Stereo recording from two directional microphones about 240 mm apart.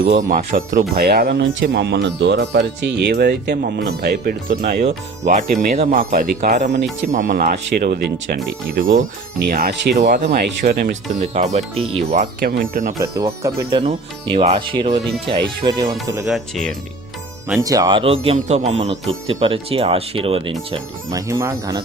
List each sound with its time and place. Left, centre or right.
0.0 s speech: right
11.2 s speech: right
12.1 s speech: right
13.0 s speech: centre
16.2 s speech: centre
17.6 s speech: centre